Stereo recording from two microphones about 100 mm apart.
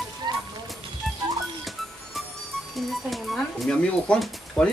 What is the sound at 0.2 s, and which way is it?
Music, 45° right (ahead or behind).